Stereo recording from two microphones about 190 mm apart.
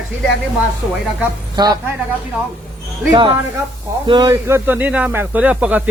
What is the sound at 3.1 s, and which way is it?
A man's voice, 25° right (ahead or behind).